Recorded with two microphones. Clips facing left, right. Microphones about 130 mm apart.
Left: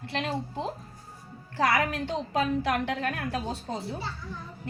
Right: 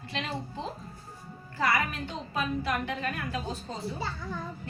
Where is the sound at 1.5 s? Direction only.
80° left.